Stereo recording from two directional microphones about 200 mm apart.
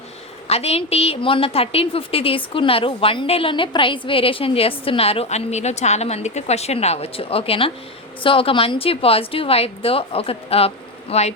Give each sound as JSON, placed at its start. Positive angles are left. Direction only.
{"t": 0.4, "sound": "a woman's voice", "side_deg": 30}